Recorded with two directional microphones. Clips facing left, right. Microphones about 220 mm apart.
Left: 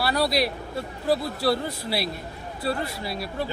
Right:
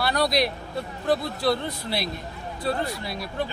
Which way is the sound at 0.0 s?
5° left (ahead or behind).